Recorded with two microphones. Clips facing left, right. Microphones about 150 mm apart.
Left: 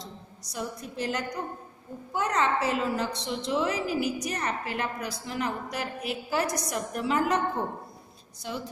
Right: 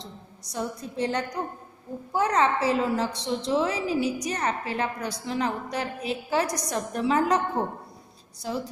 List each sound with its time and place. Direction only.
0.0 s a woman's voice: 30° right (ahead or behind)